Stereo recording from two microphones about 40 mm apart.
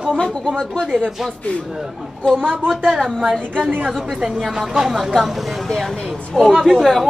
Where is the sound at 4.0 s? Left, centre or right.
Centre.